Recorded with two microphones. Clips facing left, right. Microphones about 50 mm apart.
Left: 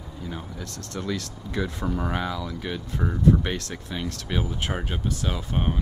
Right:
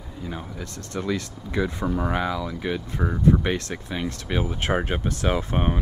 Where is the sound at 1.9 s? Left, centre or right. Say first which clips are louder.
Right 3 dB; centre.